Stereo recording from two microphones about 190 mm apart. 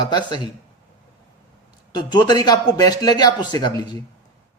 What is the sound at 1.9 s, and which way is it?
A man's voice, 20° left (ahead or behind).